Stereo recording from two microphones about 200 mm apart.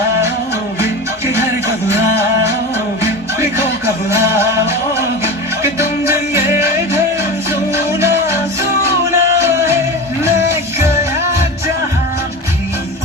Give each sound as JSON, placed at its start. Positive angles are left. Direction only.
{"t": 1.3, "sound": "music", "side_deg": -15}